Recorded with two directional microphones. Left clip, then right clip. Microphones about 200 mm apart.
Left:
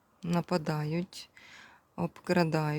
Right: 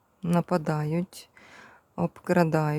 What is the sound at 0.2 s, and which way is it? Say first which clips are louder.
Speech: right 5 dB; 20° right (ahead or behind).